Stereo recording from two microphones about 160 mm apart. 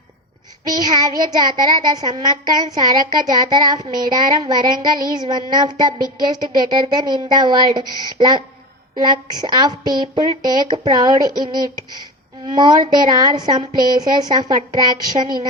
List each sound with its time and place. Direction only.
0.6 s a child's voice: 25° right (ahead or behind)